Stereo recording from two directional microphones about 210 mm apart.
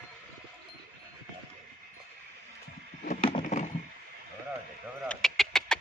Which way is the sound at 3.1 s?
25° left (ahead or behind).